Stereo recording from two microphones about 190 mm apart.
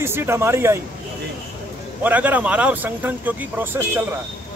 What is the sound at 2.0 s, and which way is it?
Speech, 10° right (ahead or behind).